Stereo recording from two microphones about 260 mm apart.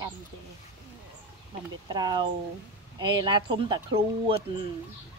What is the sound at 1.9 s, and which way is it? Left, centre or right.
Speech, centre.